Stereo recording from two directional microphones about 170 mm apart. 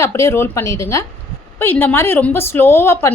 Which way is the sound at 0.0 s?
15° left (ahead or behind).